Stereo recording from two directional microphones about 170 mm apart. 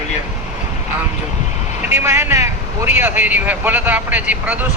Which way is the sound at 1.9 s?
15° right (ahead or behind).